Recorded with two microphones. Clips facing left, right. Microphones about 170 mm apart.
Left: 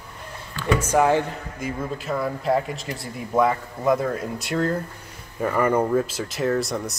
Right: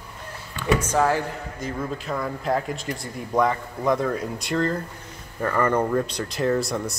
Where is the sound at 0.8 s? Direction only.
15° left (ahead or behind).